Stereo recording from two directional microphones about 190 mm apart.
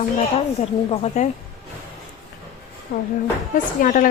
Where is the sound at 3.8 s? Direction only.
45° left (ahead or behind).